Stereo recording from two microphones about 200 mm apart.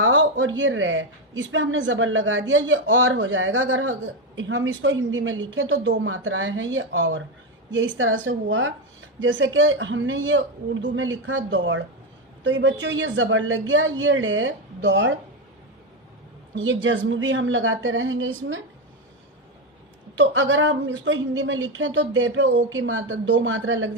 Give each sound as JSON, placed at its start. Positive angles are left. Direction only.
{"t": 0.0, "sound": "a woman's voice", "side_deg": -80}
{"t": 16.6, "sound": "speech", "side_deg": -70}
{"t": 20.1, "sound": "speech", "side_deg": -70}